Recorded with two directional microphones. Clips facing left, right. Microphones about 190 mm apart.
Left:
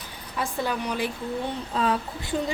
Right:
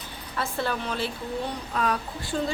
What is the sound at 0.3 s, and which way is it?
Speech, 15° left (ahead or behind).